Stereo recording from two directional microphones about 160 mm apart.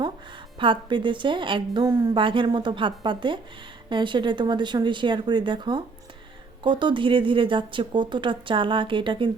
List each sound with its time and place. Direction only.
0.6 s a woman's voice: 30° right (ahead or behind)